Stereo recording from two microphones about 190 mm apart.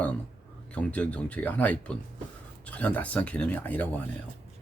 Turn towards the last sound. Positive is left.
turn(degrees=10)  # may be behind; listen again after turning